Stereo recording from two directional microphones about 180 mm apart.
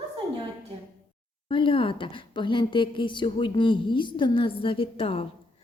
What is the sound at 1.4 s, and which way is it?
A woman's voice, 30° left (ahead or behind).